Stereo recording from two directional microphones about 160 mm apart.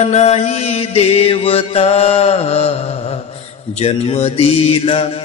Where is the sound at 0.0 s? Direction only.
45° left (ahead or behind).